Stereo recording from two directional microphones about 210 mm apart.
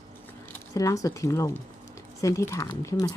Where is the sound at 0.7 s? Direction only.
15° left (ahead or behind).